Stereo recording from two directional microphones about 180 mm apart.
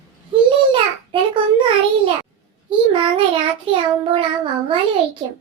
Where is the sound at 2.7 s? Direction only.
30° right (ahead or behind).